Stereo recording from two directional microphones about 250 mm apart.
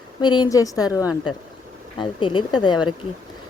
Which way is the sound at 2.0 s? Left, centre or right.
Centre.